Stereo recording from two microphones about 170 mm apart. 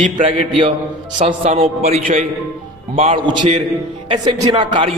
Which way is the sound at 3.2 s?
25° right (ahead or behind).